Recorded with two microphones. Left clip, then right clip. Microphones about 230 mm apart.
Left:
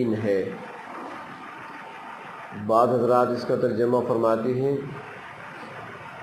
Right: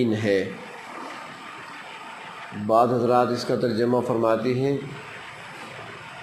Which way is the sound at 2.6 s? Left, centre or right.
Right.